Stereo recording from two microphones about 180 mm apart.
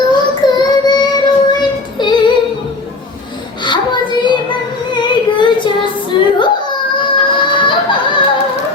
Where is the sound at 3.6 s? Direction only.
25° left (ahead or behind).